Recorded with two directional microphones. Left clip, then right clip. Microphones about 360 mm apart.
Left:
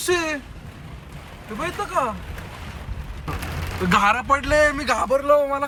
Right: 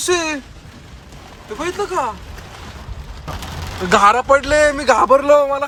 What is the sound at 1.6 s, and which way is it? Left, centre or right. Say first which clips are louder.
Speech: right 3 dB; centre.